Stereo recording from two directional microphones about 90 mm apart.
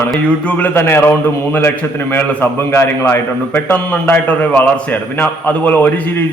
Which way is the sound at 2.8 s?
25° left (ahead or behind).